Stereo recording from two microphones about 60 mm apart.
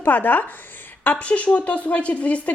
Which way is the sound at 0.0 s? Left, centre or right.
Left.